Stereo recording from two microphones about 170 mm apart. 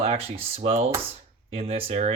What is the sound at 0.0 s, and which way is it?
Speech, 35° right (ahead or behind).